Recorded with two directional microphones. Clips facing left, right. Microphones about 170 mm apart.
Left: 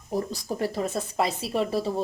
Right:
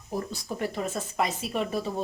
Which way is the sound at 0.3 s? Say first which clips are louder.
Left 3 dB; 35° left (ahead or behind).